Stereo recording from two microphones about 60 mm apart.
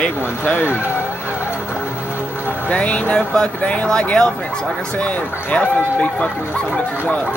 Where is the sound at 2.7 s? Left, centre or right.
Left.